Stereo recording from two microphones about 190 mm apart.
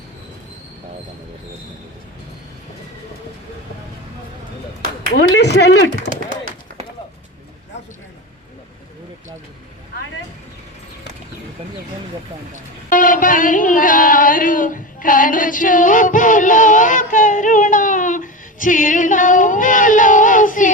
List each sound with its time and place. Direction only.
5.0 s speech: 65° left (ahead or behind)
12.9 s music: 45° left (ahead or behind)